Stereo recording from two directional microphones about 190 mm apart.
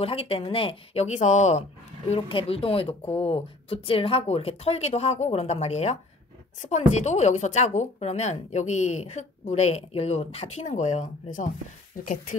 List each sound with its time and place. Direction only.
0.0 s speech: 30° left (ahead or behind)